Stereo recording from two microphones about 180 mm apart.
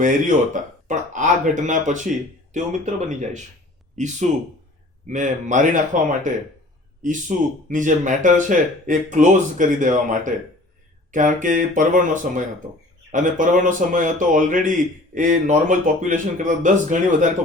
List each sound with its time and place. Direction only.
0.0 s speech: 45° right (ahead or behind)